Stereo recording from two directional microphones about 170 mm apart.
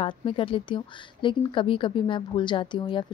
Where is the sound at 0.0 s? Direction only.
30° left (ahead or behind).